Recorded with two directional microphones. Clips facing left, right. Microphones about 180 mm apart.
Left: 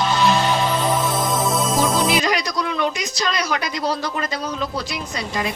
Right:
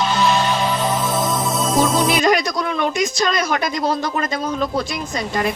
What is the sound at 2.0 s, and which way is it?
A man's voice, 50° right (ahead or behind).